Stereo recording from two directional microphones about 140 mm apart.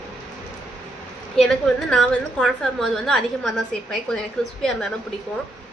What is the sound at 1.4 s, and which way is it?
A woman's voice, 5° left (ahead or behind).